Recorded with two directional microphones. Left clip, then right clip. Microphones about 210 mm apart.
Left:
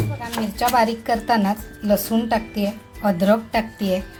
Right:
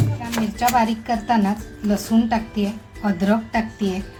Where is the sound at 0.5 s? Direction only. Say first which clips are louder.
Left 1 dB; 30° left (ahead or behind).